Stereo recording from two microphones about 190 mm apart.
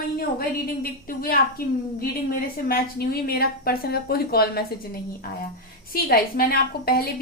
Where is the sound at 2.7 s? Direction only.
55° left (ahead or behind).